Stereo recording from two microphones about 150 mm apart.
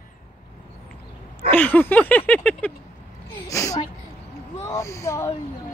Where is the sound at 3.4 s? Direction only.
20° left (ahead or behind).